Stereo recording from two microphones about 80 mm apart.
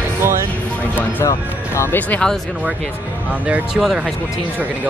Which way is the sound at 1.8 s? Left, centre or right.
Left.